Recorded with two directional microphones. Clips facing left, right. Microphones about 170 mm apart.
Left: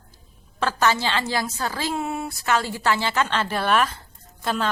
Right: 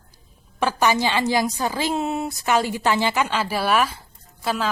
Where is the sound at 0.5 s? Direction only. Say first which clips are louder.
Right 2 dB; 15° right (ahead or behind).